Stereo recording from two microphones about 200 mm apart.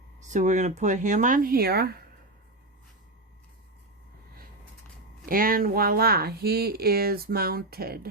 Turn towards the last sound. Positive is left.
turn(degrees=-50)  # may be behind; listen again after turning